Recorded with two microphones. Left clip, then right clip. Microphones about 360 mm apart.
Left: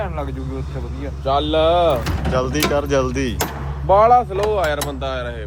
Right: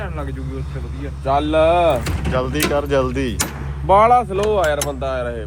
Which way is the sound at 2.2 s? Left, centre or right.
Centre.